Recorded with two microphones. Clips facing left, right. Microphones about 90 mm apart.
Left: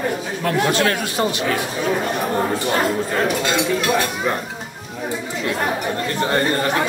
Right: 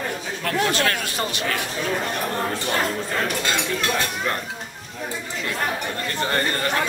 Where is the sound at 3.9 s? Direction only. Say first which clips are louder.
Left 5 dB; 15° left (ahead or behind).